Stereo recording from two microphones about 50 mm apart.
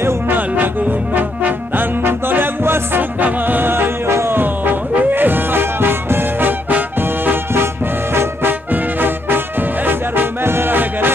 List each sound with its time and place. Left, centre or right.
1.1 s trombone: right
4.1 s music: right
4.4 s music: right
8.1 s music: right
8.7 s music: right